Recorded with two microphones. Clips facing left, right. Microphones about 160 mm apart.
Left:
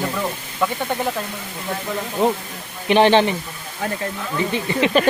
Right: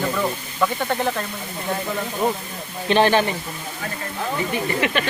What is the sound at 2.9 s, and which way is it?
Speech, 20° left (ahead or behind).